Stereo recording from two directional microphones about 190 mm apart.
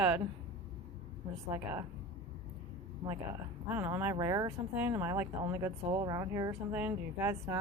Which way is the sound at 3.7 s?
10° right (ahead or behind).